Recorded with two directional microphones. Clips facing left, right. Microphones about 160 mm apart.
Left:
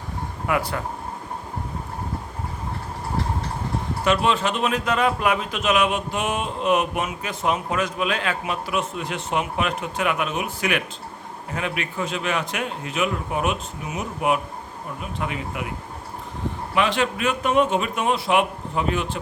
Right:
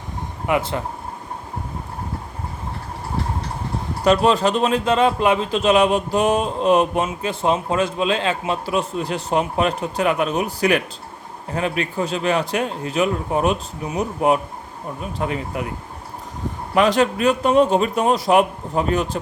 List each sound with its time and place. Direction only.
0.4 s speech: 20° right (ahead or behind)
4.0 s a man's voice: 35° right (ahead or behind)
16.7 s a man's voice: 40° right (ahead or behind)